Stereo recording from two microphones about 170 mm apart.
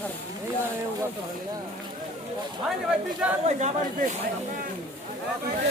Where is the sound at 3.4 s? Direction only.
45° right (ahead or behind).